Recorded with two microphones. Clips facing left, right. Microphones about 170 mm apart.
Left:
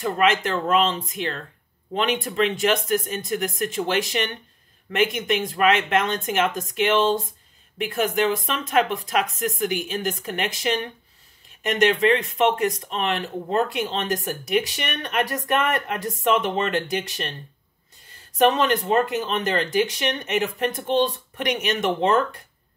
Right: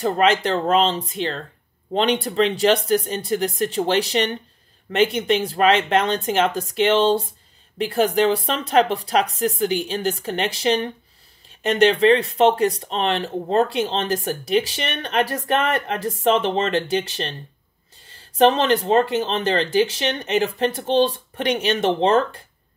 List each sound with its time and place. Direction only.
0.0 s speech: 35° right (ahead or behind)